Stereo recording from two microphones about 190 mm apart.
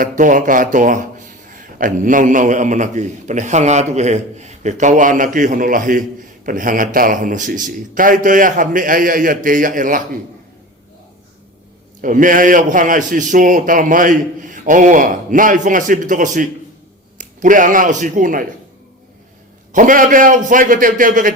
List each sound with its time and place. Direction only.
0.0 s a man's voice: 45° right (ahead or behind)
12.0 s a man's voice: 45° right (ahead or behind)
19.7 s a man's voice: 45° right (ahead or behind)